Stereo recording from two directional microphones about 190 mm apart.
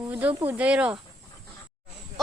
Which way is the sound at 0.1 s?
10° right (ahead or behind).